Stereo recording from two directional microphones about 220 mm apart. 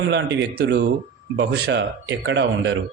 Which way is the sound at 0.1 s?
50° right (ahead or behind).